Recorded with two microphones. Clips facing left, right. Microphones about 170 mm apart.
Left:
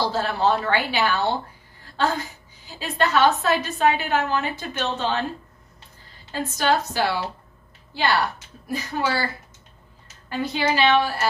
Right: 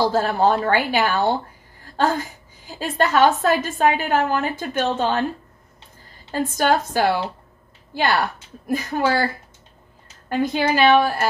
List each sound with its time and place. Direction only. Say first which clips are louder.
0.0 s a woman's voice: right 4 dB; 50° right (ahead or behind)
6.3 s a woman's voice: right 3 dB; 50° right (ahead or behind)
10.3 s a woman's voice: right 4 dB; 50° right (ahead or behind)